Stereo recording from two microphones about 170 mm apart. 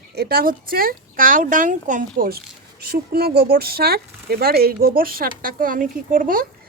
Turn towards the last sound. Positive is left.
turn(degrees=-55)  # may be behind; listen again after turning